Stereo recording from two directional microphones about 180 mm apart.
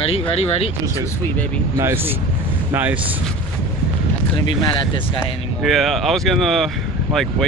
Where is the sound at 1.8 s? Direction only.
15° right (ahead or behind).